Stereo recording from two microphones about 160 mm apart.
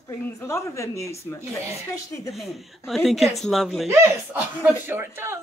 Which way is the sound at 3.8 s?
15° right (ahead or behind).